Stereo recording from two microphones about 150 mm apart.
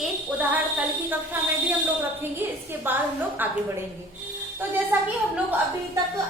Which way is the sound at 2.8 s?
10° right (ahead or behind).